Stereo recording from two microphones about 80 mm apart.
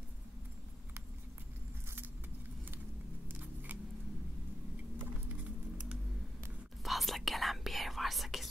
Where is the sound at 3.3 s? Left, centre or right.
Right.